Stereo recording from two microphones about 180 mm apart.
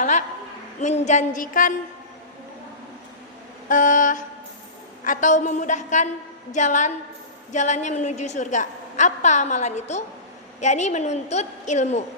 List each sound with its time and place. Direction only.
0.0 s a sound: 45° left (ahead or behind)
0.8 s a woman's voice: 40° left (ahead or behind)
3.7 s a woman's voice: 45° left (ahead or behind)